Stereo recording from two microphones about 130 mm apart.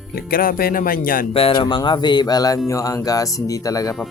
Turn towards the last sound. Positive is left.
turn(degrees=25)  # may be behind; listen again after turning